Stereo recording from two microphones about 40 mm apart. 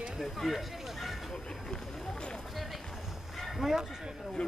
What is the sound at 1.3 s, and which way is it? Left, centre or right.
Vehicle, centre.